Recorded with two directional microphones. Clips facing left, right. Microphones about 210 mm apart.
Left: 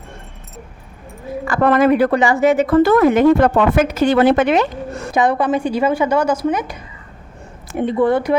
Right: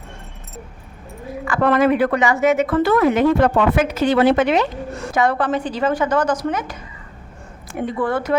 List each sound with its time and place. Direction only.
1.5 s a woman's voice: 45° left (ahead or behind)
5.1 s a woman's voice: 15° left (ahead or behind)
7.8 s speech: 25° left (ahead or behind)